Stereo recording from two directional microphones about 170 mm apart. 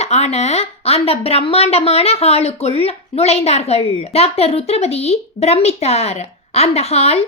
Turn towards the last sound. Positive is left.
turn(degrees=35)  # may be behind; listen again after turning